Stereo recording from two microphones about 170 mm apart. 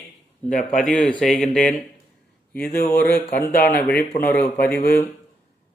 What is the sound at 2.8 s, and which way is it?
Speech, 10° left (ahead or behind).